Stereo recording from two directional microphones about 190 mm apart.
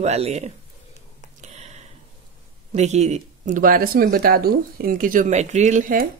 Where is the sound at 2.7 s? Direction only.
35° right (ahead or behind).